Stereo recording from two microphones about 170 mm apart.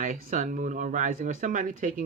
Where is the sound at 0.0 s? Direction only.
50° right (ahead or behind).